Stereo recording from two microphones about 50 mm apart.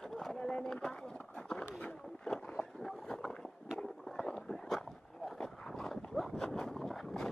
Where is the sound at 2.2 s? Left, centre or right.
Centre.